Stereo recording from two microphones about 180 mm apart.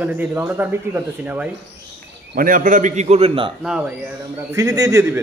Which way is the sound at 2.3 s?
50° right (ahead or behind).